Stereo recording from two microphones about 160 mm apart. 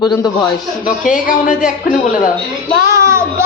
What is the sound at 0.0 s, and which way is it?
Speech, 25° left (ahead or behind).